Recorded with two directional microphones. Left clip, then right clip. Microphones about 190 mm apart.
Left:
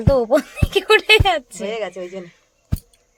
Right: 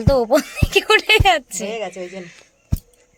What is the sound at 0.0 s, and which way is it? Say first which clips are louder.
A woman's voice: even; centre (ahead or behind).